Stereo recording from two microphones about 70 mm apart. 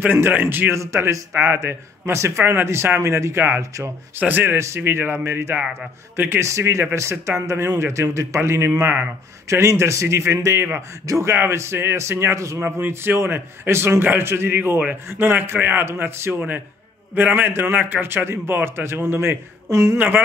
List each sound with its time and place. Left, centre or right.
0.0 s a man's voice: right
4.6 s a man's voice: right
6.4 s a man's voice: right
12.5 s a man's voice: right